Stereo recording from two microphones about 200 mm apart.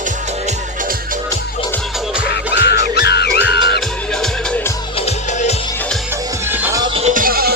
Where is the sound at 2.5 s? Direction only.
60° left (ahead or behind).